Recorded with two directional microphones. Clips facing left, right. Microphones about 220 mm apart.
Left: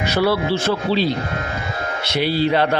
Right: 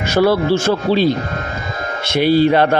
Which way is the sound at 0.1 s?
45° right (ahead or behind).